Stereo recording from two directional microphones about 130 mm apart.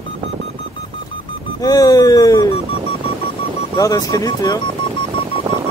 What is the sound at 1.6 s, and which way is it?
Speech, 30° left (ahead or behind).